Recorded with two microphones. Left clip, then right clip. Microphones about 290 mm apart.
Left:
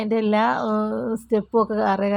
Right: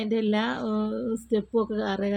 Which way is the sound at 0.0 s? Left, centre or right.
Left.